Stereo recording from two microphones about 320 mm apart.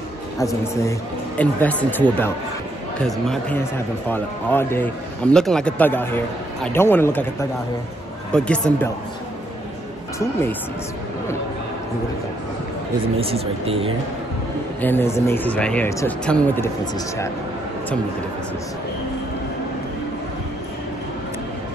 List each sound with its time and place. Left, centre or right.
0.4 s a man's voice: centre
8.3 s a man's voice: centre
13.2 s speech: centre
14.8 s a man's voice: centre